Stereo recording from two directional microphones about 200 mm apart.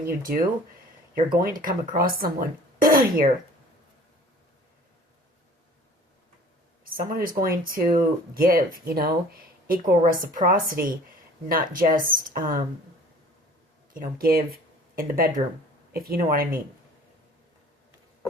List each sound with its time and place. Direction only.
0.0 s speech: 45° right (ahead or behind)
6.8 s speech: 45° right (ahead or behind)
13.9 s speech: 45° right (ahead or behind)